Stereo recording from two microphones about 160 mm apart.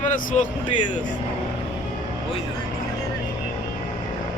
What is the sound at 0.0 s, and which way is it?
Speech, 55° left (ahead or behind).